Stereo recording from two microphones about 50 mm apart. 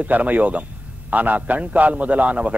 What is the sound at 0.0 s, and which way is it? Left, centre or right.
A man's voice, right.